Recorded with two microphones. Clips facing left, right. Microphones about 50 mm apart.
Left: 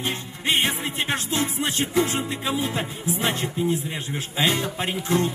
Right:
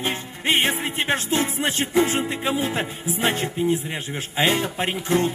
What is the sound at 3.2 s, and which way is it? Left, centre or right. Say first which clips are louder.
Music: right 3 dB; right.